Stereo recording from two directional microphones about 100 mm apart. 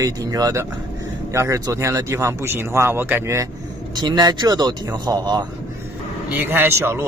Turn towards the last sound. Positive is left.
turn(degrees=-25)  # may be behind; listen again after turning